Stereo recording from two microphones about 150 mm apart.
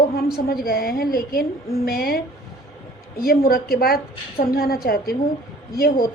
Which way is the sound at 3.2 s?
75° left (ahead or behind).